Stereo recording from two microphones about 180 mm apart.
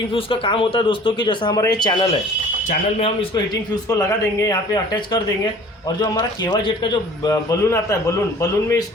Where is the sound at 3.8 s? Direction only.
20° left (ahead or behind).